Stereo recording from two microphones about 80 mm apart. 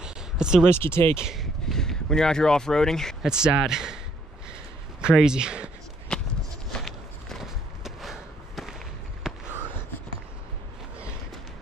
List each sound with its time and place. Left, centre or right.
0.0 s a sound: centre
0.7 s speech: left
1.1 s speech: centre
3.2 s speech: centre
5.0 s speech: centre
6.1 s a sound: centre
6.7 s walk: centre